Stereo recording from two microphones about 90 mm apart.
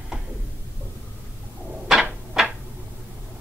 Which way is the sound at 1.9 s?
5° right (ahead or behind).